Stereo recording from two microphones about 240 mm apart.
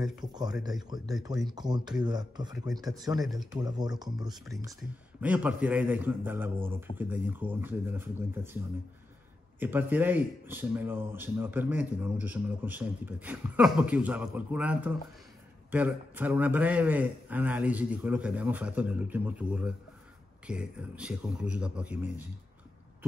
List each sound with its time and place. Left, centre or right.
0.2 s speech: centre
4.5 s speech: centre
9.6 s speech: centre